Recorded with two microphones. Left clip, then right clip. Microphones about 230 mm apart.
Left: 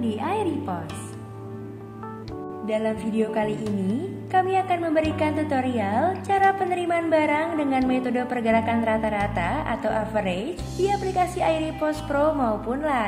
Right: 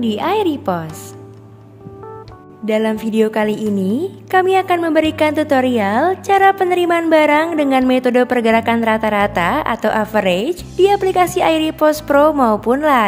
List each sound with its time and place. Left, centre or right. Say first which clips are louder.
0.0 s a woman's voice: right 9 dB; right
2.6 s a woman's voice: right 9 dB; right